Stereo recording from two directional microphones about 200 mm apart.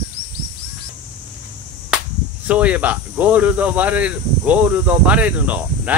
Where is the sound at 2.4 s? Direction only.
5° right (ahead or behind).